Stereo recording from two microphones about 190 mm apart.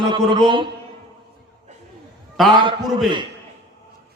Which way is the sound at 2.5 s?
25° right (ahead or behind).